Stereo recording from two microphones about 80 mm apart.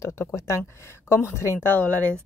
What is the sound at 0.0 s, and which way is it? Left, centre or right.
Speech, left.